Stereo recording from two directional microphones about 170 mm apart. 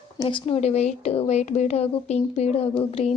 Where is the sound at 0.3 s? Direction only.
35° left (ahead or behind).